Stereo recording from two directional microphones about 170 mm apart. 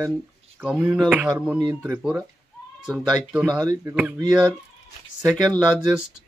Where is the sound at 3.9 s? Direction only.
10° right (ahead or behind).